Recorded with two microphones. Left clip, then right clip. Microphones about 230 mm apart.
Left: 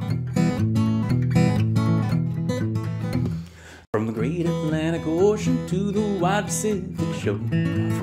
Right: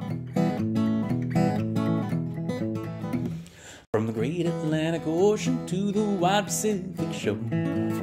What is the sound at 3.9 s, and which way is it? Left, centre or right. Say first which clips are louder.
Music: left 2 dB; centre.